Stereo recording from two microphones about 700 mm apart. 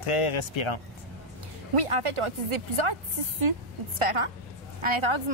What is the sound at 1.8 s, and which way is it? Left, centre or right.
A woman's voice, right.